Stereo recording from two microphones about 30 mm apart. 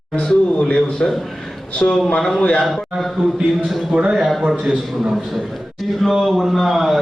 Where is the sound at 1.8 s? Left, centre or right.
Left.